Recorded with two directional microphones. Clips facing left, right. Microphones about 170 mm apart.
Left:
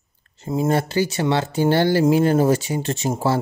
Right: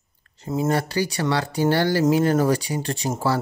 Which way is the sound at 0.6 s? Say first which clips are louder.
Left 3 dB; 25° left (ahead or behind).